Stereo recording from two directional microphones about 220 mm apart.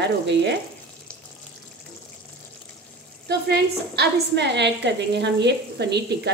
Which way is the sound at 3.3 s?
45° right (ahead or behind).